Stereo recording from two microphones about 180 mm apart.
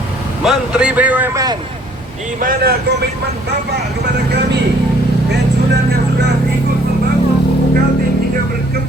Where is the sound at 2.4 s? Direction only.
55° right (ahead or behind).